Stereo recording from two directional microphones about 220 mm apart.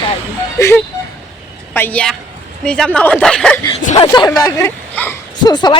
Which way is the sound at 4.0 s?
20° left (ahead or behind).